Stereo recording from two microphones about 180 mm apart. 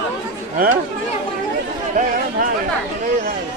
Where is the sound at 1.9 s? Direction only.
45° right (ahead or behind).